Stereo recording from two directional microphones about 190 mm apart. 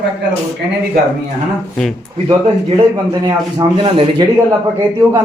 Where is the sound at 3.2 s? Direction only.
25° right (ahead or behind).